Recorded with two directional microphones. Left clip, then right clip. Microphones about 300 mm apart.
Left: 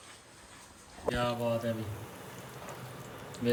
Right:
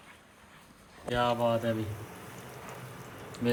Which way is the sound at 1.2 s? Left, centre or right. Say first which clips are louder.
Right 6 dB; centre.